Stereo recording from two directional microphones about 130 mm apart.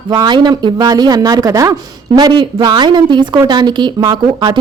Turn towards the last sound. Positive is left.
turn(degrees=-30)  # may be behind; listen again after turning